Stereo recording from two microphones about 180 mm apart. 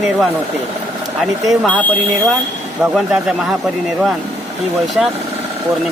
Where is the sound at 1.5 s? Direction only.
5° left (ahead or behind).